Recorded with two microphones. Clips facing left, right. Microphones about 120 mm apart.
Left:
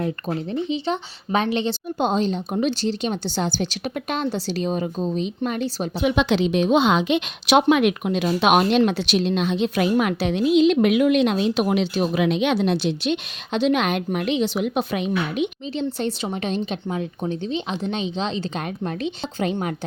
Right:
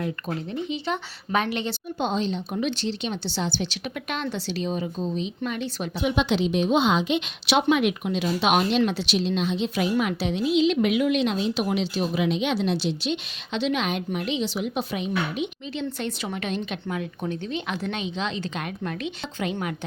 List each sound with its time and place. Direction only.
0.5 s speech: 30° left (ahead or behind)
2.0 s a woman's voice: 45° left (ahead or behind)
6.0 s a woman's voice: 75° left (ahead or behind)
7.4 s a woman's voice: 55° left (ahead or behind)
15.7 s a woman's voice: 30° left (ahead or behind)